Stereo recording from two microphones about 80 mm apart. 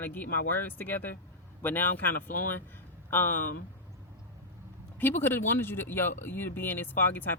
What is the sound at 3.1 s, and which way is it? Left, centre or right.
Speech, left.